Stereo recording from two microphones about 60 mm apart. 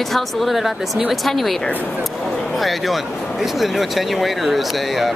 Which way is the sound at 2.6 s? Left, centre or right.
Centre.